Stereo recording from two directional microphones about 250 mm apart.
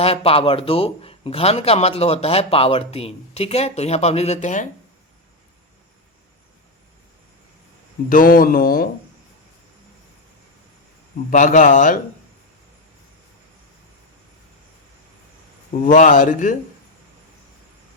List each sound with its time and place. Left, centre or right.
0.0 s a man's voice: left
8.1 s speech: left
11.3 s speech: left
15.8 s speech: left